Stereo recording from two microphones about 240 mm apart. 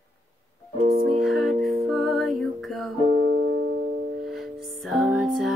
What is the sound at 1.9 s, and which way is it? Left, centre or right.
Music, centre.